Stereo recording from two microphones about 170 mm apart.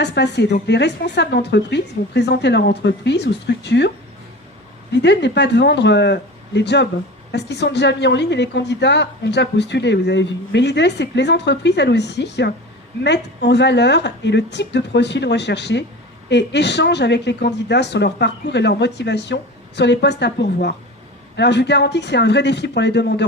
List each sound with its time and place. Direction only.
0.0 s a woman's voice: 85° left